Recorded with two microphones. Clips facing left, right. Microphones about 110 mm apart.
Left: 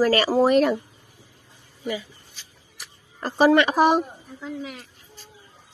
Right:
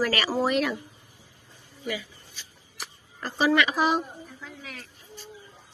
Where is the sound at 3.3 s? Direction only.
50° left (ahead or behind).